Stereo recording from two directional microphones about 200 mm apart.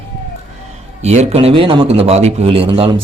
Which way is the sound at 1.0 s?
30° right (ahead or behind).